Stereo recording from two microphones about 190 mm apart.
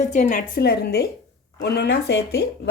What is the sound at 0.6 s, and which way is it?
Speech, 55° left (ahead or behind).